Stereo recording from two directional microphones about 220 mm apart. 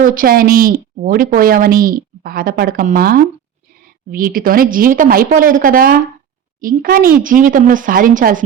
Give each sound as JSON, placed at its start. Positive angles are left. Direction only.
{"t": 0.0, "sound": "a woman's voice", "side_deg": -40}